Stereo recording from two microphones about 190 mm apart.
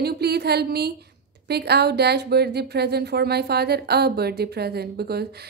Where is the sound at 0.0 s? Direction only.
60° right (ahead or behind).